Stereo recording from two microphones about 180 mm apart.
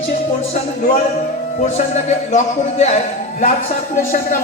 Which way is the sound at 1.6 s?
40° left (ahead or behind).